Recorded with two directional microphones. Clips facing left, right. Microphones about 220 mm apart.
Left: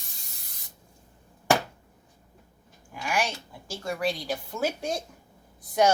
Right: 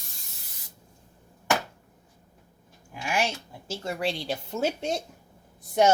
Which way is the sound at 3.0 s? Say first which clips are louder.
Right 1 dB; 25° right (ahead or behind).